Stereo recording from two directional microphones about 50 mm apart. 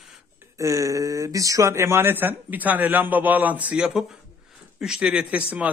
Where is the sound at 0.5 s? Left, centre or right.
Right.